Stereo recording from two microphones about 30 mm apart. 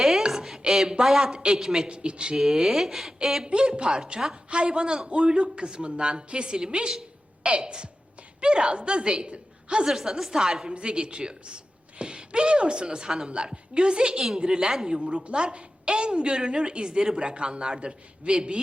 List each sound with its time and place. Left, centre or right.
0.3 s a sound: centre
1.0 s speech: centre
1.3 s a woman's voice: right
1.5 s speech: centre
1.9 s a woman's voice: right
2.3 s speech: centre
3.4 s a woman's voice: right
9.9 s speech: centre
10.7 s a woman's voice: right